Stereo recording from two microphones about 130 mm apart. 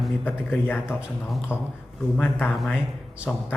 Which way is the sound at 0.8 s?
5° right (ahead or behind).